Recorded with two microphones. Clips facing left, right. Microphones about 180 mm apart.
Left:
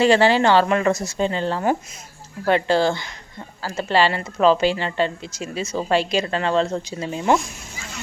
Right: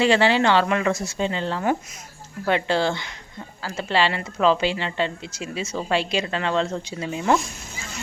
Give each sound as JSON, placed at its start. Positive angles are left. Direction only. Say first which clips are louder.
{"t": 0.0, "sound": "a woman's voice", "louder": "left 3 dB", "side_deg": 40}